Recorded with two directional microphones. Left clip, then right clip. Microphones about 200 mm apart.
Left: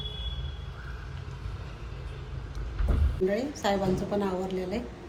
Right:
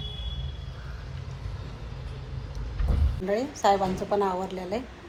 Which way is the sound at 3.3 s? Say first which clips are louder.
Right 9 dB; 10° right (ahead or behind).